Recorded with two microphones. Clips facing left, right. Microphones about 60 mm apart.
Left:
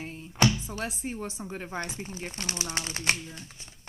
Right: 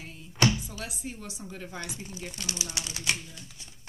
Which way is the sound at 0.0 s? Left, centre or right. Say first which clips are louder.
Left 6 dB; left.